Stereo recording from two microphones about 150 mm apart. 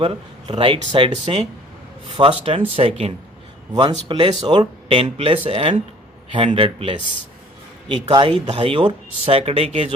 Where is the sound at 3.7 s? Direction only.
30° right (ahead or behind).